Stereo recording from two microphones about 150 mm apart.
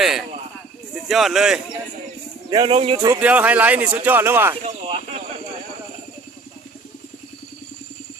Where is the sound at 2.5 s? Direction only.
35° right (ahead or behind).